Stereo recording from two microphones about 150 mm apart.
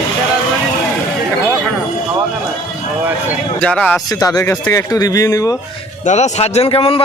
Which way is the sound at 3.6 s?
10° left (ahead or behind).